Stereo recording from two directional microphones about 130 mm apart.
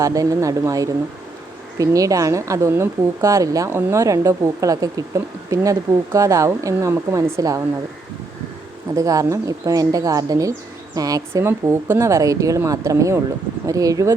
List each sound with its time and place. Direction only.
0.0 s a woman's voice: 25° right (ahead or behind)
9.0 s a woman's voice: 25° right (ahead or behind)